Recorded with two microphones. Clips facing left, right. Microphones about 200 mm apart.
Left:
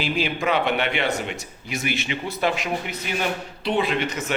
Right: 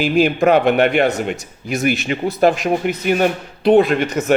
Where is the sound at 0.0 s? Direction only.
50° right (ahead or behind).